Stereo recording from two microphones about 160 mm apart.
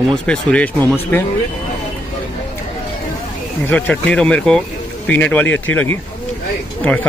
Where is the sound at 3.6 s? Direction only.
10° left (ahead or behind).